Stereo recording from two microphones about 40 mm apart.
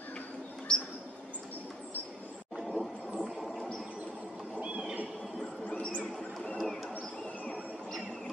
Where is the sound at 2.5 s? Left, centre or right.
Centre.